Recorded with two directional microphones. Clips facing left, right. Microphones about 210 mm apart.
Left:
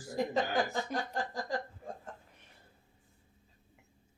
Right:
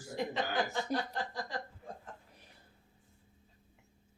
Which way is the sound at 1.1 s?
45° left (ahead or behind).